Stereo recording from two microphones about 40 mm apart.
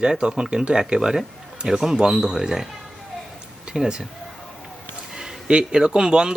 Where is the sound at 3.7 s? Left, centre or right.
Centre.